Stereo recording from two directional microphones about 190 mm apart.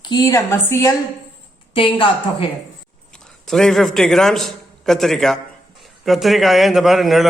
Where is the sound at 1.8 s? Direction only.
25° left (ahead or behind).